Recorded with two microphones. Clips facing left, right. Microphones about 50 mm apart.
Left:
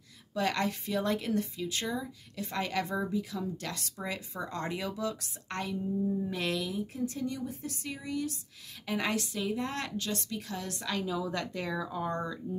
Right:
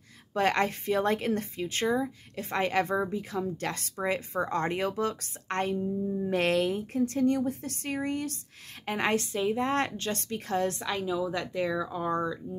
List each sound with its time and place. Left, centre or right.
0.3 s a woman's voice: right
8.8 s speech: right
10.8 s a woman's voice: centre
11.1 s speech: centre